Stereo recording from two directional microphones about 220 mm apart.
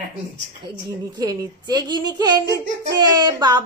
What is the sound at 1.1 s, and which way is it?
A woman's voice, 20° right (ahead or behind).